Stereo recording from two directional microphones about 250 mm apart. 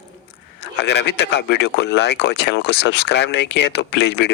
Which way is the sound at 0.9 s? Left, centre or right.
Left.